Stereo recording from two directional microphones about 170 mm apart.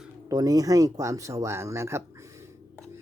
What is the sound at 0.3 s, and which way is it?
Speech, 20° right (ahead or behind).